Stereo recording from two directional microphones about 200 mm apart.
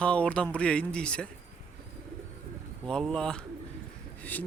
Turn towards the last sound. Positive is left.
turn(degrees=10)  # may be behind; listen again after turning